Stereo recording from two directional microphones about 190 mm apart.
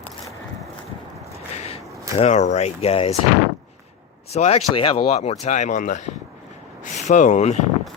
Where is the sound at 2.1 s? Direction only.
40° left (ahead or behind).